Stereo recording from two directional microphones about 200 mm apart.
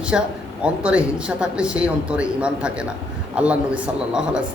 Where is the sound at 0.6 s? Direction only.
5° right (ahead or behind).